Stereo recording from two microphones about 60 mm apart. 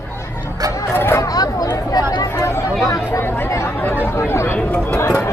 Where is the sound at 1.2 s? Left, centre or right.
Left.